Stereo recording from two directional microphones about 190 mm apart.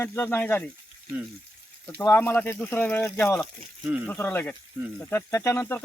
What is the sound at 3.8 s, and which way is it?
Speech, 10° right (ahead or behind).